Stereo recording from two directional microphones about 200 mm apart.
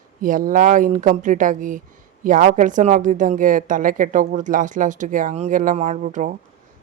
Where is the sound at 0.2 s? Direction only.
45° right (ahead or behind).